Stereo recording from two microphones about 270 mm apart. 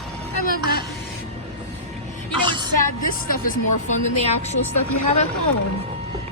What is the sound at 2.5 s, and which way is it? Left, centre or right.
Music, centre.